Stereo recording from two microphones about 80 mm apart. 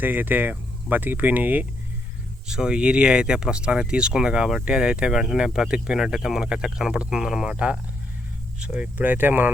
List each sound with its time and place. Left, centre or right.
0.0 s speech: right
2.5 s speech: centre